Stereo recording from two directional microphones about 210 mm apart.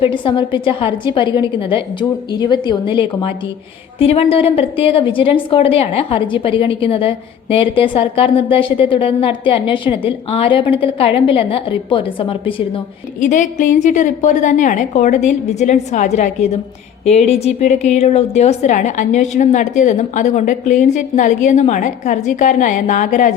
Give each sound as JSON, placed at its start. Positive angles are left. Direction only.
{"t": 0.0, "sound": "a woman's voice", "side_deg": 25}
{"t": 13.1, "sound": "a woman's voice", "side_deg": 35}